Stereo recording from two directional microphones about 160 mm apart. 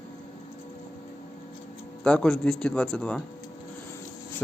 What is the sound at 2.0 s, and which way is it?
A man's voice, 5° left (ahead or behind).